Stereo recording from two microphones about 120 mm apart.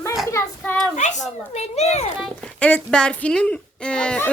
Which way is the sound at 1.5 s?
65° left (ahead or behind).